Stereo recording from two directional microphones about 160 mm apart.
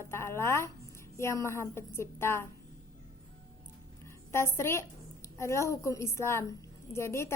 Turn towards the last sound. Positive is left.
turn(degrees=15)  # may be behind; listen again after turning